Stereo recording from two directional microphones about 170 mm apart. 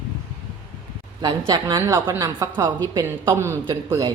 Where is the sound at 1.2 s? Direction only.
25° right (ahead or behind).